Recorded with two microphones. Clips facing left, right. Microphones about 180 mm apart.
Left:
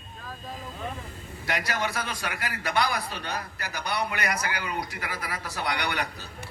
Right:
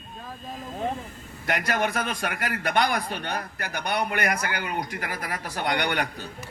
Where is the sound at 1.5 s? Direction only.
50° right (ahead or behind).